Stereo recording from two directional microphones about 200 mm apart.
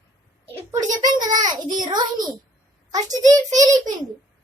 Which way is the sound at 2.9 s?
20° right (ahead or behind).